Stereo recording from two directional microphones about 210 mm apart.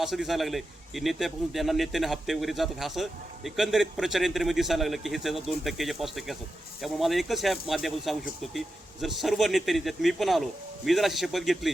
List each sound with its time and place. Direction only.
0.0 s a man's voice: centre (ahead or behind)